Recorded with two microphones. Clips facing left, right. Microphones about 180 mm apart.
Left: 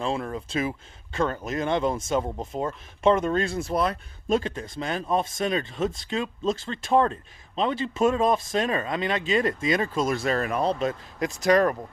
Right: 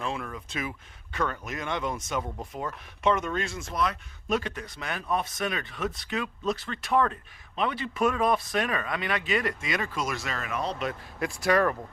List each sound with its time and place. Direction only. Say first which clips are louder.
0.0 s speech: left 5 dB; 35° left (ahead or behind)